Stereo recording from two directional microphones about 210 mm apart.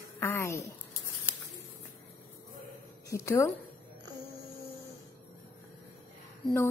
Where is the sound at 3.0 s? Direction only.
15° left (ahead or behind).